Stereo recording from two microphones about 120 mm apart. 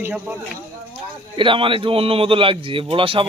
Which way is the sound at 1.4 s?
45° right (ahead or behind).